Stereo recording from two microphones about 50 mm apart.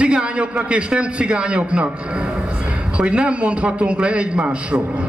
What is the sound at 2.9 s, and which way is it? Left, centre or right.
A man's voice, right.